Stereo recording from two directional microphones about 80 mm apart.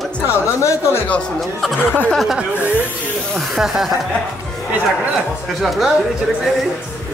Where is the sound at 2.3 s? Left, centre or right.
Right.